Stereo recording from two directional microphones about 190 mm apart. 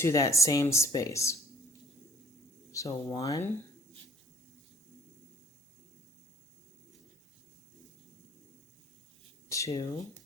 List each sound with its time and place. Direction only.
0.0 s speech: 15° left (ahead or behind)
2.7 s speech: 15° left (ahead or behind)
9.5 s speech: 15° left (ahead or behind)